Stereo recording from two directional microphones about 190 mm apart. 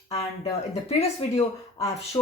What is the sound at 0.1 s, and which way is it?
Speech, 30° left (ahead or behind).